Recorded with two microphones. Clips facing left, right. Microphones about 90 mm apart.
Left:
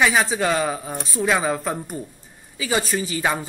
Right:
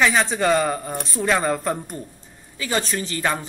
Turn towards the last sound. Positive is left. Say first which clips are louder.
# left 1 dB
turn(degrees=10)  # may be behind; listen again after turning